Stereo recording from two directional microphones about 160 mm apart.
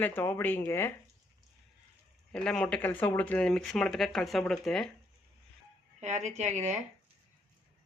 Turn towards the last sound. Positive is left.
turn(degrees=-45)  # may be behind; listen again after turning